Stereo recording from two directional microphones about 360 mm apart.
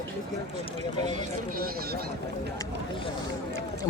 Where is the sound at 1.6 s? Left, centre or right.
Right.